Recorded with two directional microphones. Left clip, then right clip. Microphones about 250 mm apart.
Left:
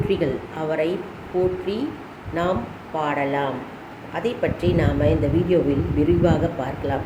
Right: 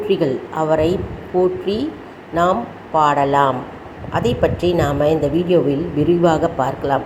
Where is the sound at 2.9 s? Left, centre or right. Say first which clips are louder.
Right 9 dB; centre.